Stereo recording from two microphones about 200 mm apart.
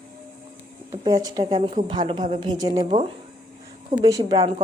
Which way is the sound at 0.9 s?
20° right (ahead or behind).